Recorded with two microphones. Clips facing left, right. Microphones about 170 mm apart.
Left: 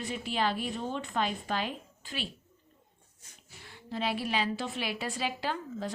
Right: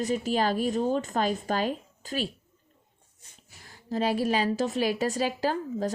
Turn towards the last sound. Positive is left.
turn(degrees=-40)  # may be behind; listen again after turning